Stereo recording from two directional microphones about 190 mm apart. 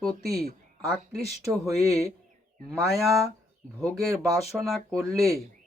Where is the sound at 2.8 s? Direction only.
Centre (ahead or behind).